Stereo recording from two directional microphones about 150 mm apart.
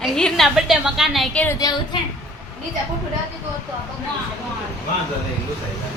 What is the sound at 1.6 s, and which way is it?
Speech, 25° left (ahead or behind).